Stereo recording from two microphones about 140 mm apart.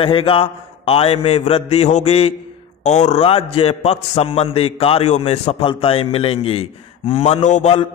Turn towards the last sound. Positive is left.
turn(degrees=55)  # may be behind; listen again after turning